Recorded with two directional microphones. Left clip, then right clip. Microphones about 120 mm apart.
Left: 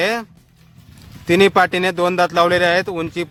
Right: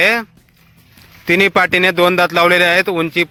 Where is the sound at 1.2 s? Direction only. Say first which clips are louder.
Right 1 dB; 15° right (ahead or behind).